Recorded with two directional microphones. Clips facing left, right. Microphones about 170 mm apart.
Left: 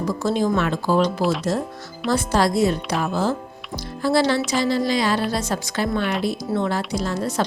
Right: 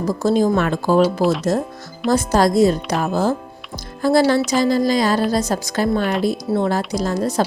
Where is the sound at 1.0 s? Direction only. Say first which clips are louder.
Right 4 dB; centre (ahead or behind).